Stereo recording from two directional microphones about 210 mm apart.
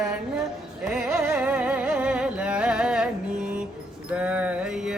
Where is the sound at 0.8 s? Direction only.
5° right (ahead or behind).